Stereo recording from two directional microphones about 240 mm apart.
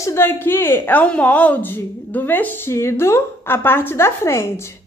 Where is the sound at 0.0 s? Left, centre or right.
Centre.